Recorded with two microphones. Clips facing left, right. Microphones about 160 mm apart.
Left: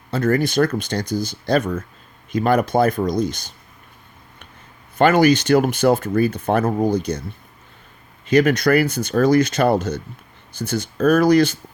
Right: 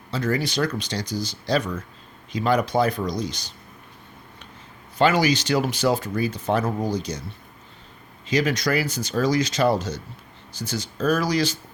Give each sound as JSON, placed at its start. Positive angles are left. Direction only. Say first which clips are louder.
{"t": 0.1, "sound": "speech", "louder": "left 6 dB", "side_deg": 50}
{"t": 4.9, "sound": "speech", "louder": "left 5 dB", "side_deg": 55}
{"t": 8.3, "sound": "speech", "louder": "left 7 dB", "side_deg": 55}